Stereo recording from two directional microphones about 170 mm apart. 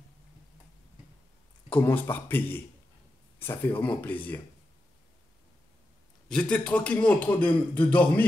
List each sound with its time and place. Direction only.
1.7 s a man's voice: 10° left (ahead or behind)
6.2 s a man's voice: 5° left (ahead or behind)